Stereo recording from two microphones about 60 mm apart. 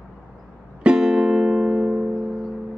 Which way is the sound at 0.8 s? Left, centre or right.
Centre.